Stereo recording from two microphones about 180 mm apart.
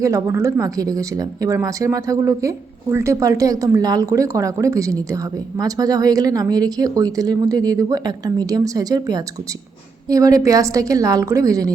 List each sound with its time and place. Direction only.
0.0 s speech: 15° right (ahead or behind)